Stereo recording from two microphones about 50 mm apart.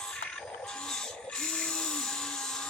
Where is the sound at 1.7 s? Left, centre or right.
Centre.